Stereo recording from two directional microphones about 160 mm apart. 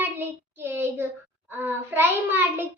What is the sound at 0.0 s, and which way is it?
Child singing, 15° right (ahead or behind).